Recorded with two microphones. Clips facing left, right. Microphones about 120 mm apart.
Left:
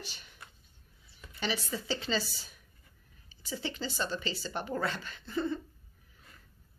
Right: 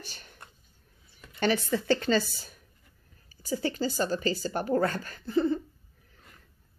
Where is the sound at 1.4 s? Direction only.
55° right (ahead or behind); by 5.6 s 40° right (ahead or behind).